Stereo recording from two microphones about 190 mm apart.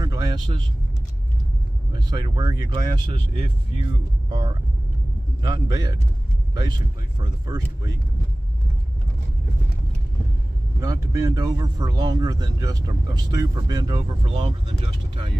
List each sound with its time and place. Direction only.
0.0 s vehicle: 20° right (ahead or behind)
1.9 s speech: 25° right (ahead or behind)
10.8 s speech: 15° right (ahead or behind)